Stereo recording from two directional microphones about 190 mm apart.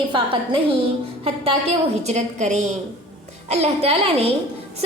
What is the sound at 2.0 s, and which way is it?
A woman's voice, 40° right (ahead or behind).